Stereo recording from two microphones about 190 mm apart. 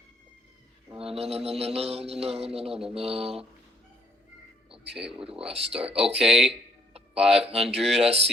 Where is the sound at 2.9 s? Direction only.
30° right (ahead or behind).